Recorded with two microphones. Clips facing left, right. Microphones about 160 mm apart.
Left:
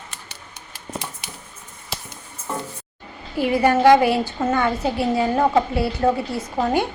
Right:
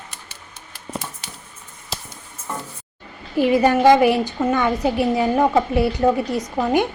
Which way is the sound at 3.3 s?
20° right (ahead or behind).